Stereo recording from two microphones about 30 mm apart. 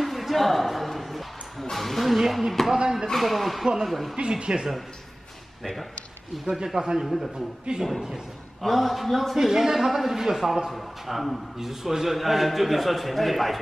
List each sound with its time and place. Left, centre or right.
0.0 s music: centre
2.6 s a man's voice: centre
4.2 s speech: right
5.6 s speech: centre
6.4 s speech: centre
7.7 s speech: right
8.6 s a man's voice: centre
9.4 s a man's voice: centre